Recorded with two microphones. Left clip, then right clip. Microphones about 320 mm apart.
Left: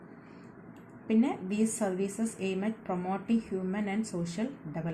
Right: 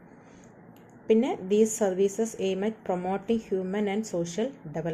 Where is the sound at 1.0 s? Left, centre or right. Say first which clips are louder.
Right 6 dB; right.